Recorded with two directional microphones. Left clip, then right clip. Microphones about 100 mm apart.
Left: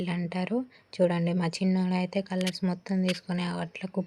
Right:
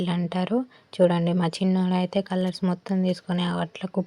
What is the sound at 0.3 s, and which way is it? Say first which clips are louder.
Speech: right 5 dB; 20° right (ahead or behind).